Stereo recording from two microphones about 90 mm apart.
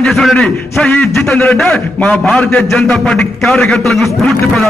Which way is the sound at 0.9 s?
15° left (ahead or behind).